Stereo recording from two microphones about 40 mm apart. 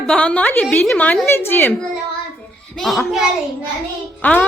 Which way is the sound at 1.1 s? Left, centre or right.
Left.